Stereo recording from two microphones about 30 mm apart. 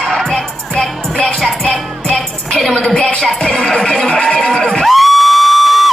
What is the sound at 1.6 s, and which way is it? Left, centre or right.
Music, left.